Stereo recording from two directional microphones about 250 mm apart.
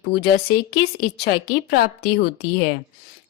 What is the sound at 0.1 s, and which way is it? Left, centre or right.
A woman's voice, left.